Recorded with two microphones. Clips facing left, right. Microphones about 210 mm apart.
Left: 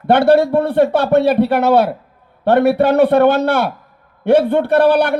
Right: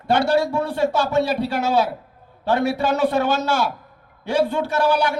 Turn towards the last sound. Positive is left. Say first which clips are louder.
# left 8 dB
turn(degrees=60)  # may be behind; listen again after turning